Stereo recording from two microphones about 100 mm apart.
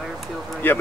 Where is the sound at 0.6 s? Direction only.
20° left (ahead or behind).